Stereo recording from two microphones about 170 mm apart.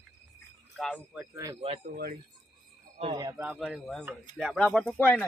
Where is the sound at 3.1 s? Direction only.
20° right (ahead or behind).